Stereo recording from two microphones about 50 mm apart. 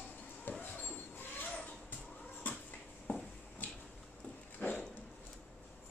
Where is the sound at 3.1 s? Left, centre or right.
Left.